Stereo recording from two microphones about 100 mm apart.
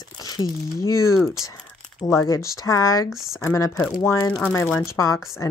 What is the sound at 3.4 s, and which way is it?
Speech, 30° left (ahead or behind).